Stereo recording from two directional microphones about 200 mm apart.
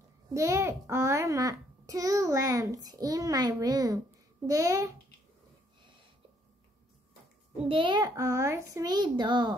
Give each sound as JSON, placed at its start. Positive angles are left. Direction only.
{"t": 0.3, "sound": "a child's voice", "side_deg": -15}
{"t": 7.5, "sound": "a child's voice", "side_deg": -25}